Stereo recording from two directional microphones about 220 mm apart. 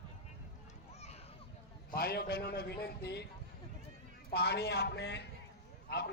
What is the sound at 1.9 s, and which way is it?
A man's voice, 45° left (ahead or behind).